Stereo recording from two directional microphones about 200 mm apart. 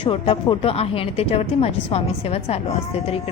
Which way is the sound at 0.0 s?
25° left (ahead or behind).